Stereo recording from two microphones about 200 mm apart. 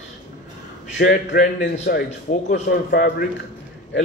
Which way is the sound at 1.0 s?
55° left (ahead or behind).